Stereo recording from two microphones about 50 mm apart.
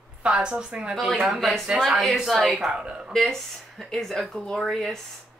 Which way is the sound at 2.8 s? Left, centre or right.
Centre.